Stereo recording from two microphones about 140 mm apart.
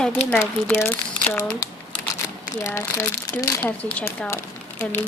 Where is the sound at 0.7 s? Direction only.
15° left (ahead or behind).